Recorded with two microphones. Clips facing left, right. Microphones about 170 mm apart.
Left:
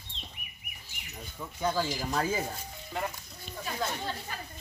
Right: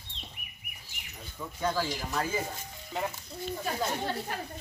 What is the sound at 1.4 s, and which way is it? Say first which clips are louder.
Speech: even; 10° left (ahead or behind).